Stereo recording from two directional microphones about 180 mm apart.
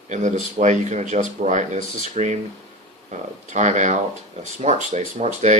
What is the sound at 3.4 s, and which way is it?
Speech, 40° right (ahead or behind).